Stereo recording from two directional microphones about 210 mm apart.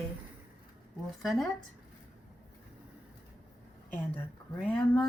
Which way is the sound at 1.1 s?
Centre (ahead or behind).